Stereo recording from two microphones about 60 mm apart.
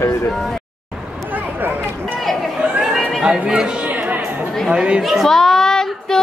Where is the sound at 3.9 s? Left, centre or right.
Right.